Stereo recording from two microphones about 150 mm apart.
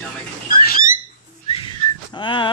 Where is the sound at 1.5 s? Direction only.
30° left (ahead or behind).